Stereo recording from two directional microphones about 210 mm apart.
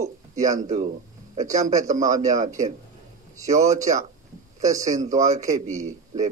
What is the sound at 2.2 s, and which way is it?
Speech, 35° right (ahead or behind).